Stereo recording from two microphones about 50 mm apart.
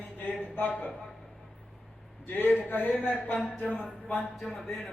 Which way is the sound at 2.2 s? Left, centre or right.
Left.